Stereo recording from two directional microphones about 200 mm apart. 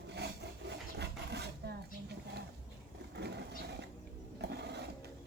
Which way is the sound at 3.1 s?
55° right (ahead or behind).